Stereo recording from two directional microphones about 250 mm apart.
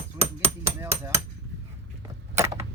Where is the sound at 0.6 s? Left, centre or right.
Centre.